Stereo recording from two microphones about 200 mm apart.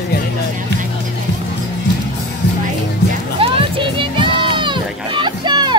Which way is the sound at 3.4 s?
25° right (ahead or behind).